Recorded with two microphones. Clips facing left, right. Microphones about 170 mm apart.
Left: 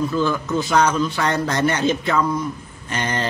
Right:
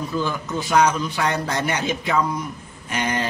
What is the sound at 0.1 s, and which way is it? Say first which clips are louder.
A man's voice: left 4 dB; 15° right (ahead or behind).